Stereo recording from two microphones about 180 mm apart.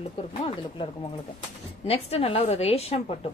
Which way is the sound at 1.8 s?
35° left (ahead or behind).